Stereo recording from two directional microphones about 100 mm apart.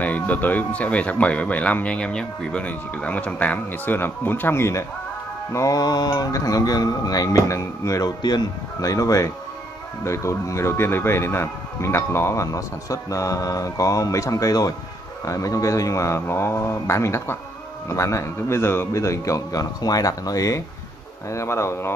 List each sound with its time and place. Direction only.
0.0 s speech: 15° left (ahead or behind); by 8.1 s 30° left (ahead or behind)
8.2 s speech: 45° left (ahead or behind)
8.8 s speech: 35° left (ahead or behind)